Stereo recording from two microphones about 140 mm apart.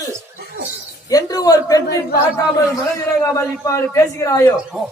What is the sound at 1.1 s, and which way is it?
Speech, 25° left (ahead or behind).